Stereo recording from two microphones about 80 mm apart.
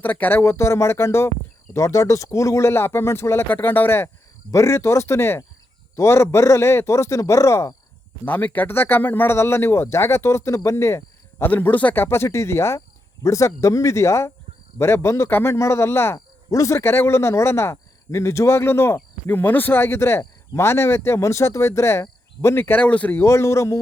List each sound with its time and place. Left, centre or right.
0.0 s speech: left
8.2 s speech: left
11.5 s speech: left
12.0 s speech: left
16.1 s speech: left
22.8 s speech: centre
23.2 s speech: left